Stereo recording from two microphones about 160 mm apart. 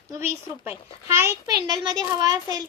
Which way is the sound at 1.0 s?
15° right (ahead or behind).